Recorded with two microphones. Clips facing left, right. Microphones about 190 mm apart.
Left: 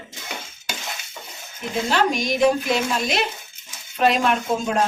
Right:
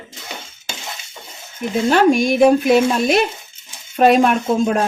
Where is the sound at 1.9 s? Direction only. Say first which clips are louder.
Right 8 dB; 50° right (ahead or behind).